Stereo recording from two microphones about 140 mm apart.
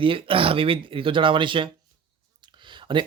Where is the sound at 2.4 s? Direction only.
35° right (ahead or behind).